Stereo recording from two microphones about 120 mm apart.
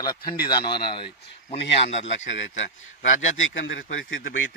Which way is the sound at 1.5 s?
65° left (ahead or behind).